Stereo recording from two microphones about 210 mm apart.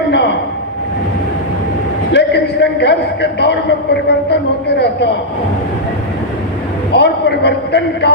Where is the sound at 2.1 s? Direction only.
55° left (ahead or behind).